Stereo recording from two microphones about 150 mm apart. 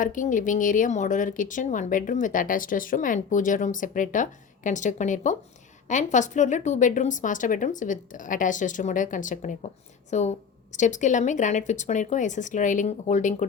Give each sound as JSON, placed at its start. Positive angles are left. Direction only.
{"t": 0.0, "sound": "a woman's voice", "side_deg": 60}